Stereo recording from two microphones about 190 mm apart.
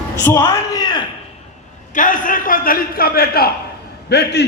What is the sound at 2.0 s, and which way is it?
A man's voice, 45° left (ahead or behind).